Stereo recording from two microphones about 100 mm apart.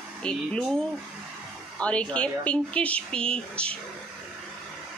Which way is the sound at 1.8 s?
10° left (ahead or behind).